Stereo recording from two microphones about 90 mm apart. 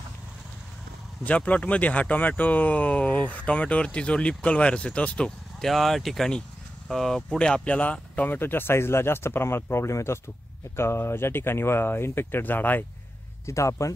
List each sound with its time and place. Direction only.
1.2 s speech: 15° left (ahead or behind)
13.5 s speech: 35° left (ahead or behind)